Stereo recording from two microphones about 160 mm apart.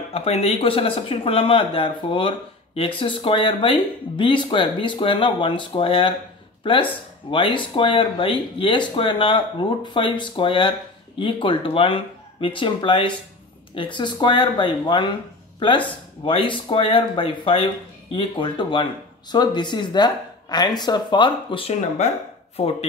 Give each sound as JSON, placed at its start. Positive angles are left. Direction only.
{"t": 0.1, "sound": "speech", "side_deg": 40}
{"t": 16.3, "sound": "speech", "side_deg": 30}